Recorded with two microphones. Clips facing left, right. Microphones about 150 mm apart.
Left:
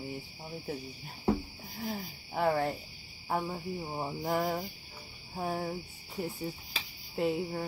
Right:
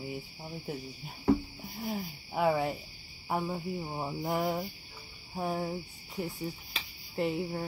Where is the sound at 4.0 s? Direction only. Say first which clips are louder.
Left 1 dB; centre (ahead or behind).